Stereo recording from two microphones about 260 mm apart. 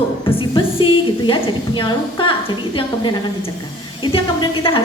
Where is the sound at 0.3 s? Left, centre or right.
Centre.